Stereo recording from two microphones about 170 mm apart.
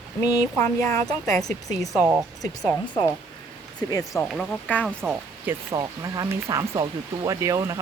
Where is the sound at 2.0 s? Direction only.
10° right (ahead or behind).